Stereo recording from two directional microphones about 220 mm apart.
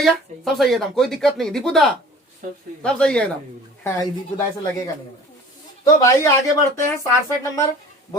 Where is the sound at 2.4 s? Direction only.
35° right (ahead or behind).